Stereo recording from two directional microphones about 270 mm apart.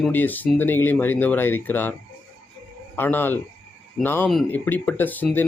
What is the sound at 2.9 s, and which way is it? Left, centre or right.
Speech, centre.